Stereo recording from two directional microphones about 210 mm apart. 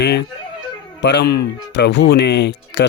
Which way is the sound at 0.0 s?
55° left (ahead or behind).